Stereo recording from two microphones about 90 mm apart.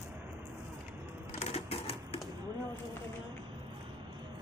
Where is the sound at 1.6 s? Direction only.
90° left.